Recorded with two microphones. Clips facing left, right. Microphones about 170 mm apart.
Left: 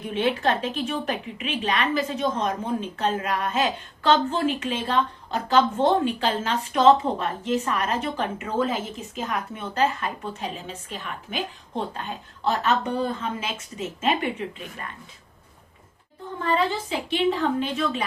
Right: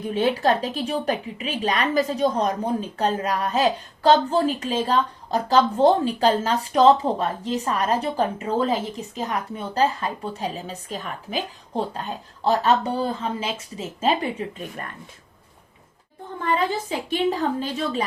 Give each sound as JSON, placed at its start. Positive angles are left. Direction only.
{"t": 0.1, "sound": "a woman's voice", "side_deg": -40}
{"t": 16.9, "sound": "a woman's voice", "side_deg": -40}